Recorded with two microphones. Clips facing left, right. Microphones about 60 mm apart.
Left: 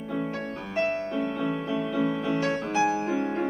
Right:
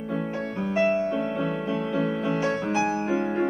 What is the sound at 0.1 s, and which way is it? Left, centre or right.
Music, centre.